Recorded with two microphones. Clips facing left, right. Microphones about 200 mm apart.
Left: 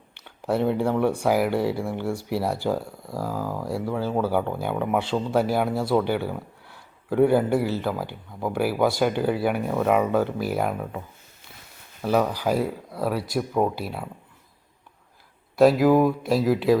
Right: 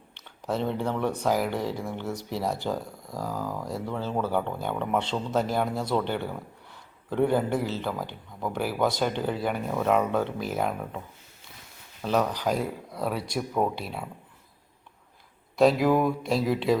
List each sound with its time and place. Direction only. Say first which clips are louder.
0.1 s speech: left 5 dB; 10° left (ahead or behind)
12.0 s speech: left 3 dB; 10° left (ahead or behind)
15.5 s speech: left 4 dB; 5° left (ahead or behind)